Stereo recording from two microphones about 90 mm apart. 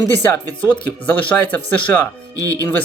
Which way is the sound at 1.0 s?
20° left (ahead or behind).